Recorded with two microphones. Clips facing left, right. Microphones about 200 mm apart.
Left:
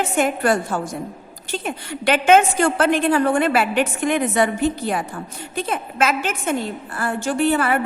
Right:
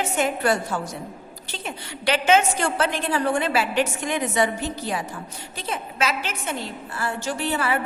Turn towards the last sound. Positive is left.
turn(degrees=55)  # may be behind; listen again after turning